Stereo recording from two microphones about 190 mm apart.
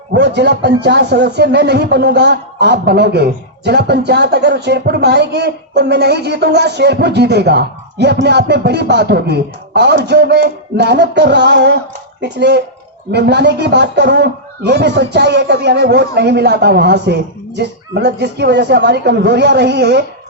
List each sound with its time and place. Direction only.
0.1 s speech: 60° right (ahead or behind)